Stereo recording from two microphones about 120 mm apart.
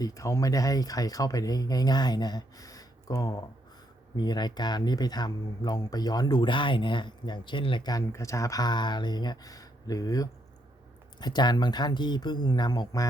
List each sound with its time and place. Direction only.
0.0 s speech: 25° left (ahead or behind); by 7.9 s 45° left (ahead or behind)
7.9 s speech: 25° left (ahead or behind)